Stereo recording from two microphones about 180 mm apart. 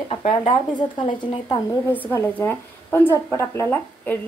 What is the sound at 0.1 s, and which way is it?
Speech, 30° left (ahead or behind).